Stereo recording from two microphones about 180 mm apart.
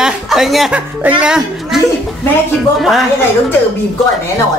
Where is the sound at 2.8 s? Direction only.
Centre (ahead or behind).